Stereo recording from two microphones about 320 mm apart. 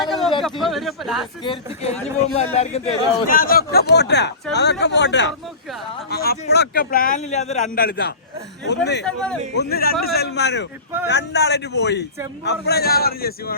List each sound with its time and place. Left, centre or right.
0.0 s a sound: centre
0.6 s speech: centre
1.5 s a man's voice: centre
9.0 s speech: centre
9.6 s a man's voice: left